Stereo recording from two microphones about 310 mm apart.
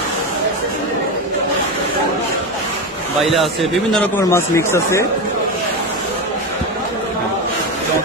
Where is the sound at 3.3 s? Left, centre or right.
Centre.